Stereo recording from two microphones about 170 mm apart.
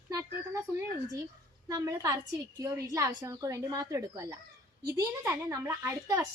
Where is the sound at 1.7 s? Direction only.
20° right (ahead or behind).